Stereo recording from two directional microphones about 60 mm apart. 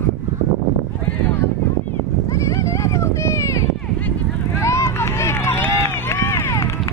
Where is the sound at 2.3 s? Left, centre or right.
Left.